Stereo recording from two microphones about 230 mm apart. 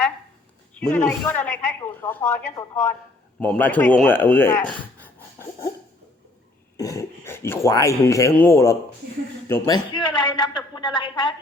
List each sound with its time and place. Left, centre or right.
0.9 s speech: centre
4.7 s a sound: centre
6.7 s a man's voice: centre